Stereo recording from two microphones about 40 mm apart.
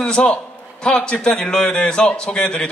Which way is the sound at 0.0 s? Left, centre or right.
Left.